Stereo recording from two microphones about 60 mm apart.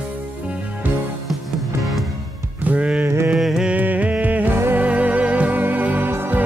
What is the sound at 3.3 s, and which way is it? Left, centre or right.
Music, centre.